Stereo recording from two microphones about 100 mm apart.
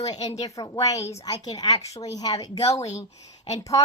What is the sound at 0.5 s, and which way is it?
A woman's voice, 35° left (ahead or behind).